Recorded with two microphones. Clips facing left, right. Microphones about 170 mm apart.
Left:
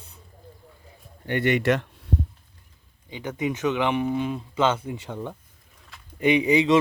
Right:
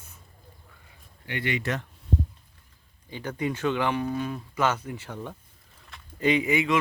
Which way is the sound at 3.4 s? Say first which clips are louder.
Left 2 dB; 15° left (ahead or behind).